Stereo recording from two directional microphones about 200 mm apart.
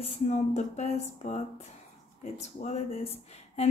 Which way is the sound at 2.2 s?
35° left (ahead or behind).